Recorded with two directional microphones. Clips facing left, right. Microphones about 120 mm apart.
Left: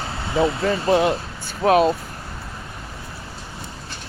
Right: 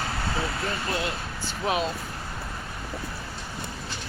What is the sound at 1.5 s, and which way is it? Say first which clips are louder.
Speech: left 11 dB; 50° left (ahead or behind).